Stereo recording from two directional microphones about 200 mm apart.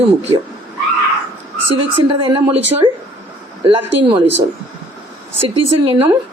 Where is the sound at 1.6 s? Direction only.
25° right (ahead or behind).